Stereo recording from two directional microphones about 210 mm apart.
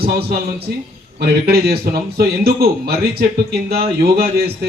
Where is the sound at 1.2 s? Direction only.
50° right (ahead or behind).